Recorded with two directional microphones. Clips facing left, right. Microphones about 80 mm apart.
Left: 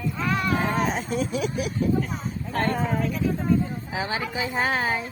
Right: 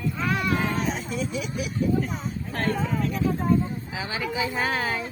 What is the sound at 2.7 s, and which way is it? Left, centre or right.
Speech, left.